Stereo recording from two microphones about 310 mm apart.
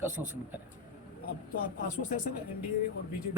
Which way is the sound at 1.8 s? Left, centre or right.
Left.